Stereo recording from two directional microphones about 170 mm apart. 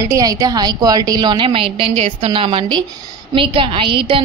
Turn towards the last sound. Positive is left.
turn(degrees=-30)  # may be behind; listen again after turning